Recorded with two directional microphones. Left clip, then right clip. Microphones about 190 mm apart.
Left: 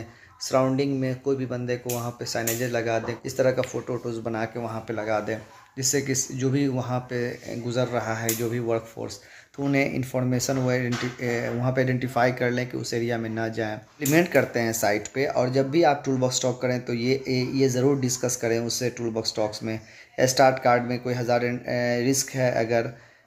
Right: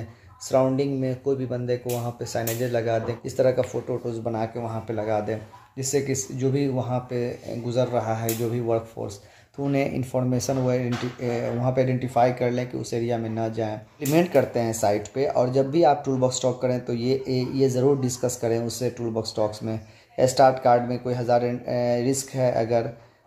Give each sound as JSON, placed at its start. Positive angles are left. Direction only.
{"t": 0.4, "sound": "speech", "side_deg": 5}